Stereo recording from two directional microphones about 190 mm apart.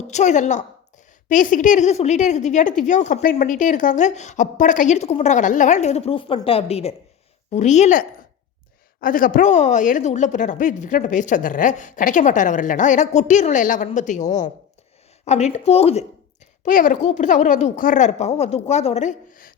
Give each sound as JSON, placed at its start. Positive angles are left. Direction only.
{"t": 0.1, "sound": "a woman's voice", "side_deg": 40}
{"t": 16.6, "sound": "a woman's voice", "side_deg": 45}